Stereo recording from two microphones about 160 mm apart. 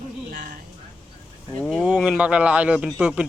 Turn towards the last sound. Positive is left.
turn(degrees=-5)  # may be behind; listen again after turning